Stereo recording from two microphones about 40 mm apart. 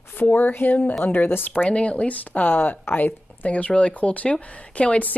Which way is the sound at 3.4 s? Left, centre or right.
Left.